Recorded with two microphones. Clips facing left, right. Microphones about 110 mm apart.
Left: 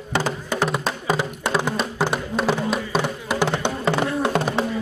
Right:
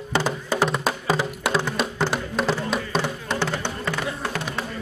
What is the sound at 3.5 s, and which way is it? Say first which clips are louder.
Music: left 5 dB; 25° left (ahead or behind).